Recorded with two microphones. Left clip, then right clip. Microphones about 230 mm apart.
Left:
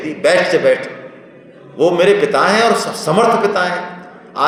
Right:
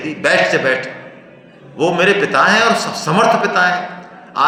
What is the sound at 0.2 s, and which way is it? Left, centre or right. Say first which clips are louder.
Speech: left 1 dB; right.